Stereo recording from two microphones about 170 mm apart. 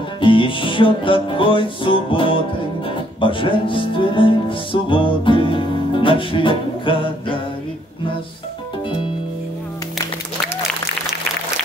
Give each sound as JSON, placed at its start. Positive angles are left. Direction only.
{"t": 0.2, "sound": "music", "side_deg": 30}